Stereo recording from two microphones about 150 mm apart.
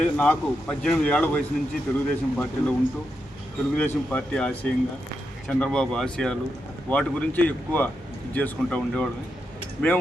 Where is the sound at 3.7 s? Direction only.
10° left (ahead or behind).